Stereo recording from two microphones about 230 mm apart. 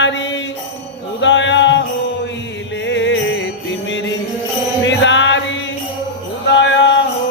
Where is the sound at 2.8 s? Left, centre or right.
Left.